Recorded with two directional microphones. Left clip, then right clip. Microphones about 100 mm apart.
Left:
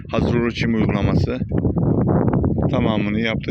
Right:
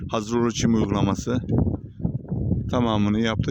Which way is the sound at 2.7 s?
40° right (ahead or behind).